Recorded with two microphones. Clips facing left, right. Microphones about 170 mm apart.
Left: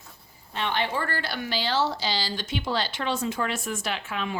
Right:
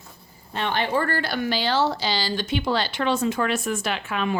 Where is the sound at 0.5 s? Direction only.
45° right (ahead or behind).